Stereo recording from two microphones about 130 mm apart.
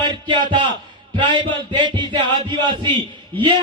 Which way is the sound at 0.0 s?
40° right (ahead or behind).